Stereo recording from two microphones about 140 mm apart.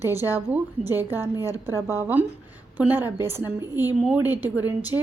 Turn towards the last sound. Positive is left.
turn(degrees=-15)  # may be behind; listen again after turning